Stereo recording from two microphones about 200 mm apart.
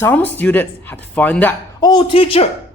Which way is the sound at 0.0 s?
10° left (ahead or behind).